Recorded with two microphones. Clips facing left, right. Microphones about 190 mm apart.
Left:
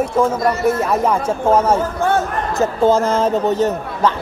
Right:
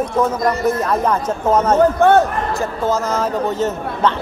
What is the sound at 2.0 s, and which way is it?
Speech, 65° right (ahead or behind).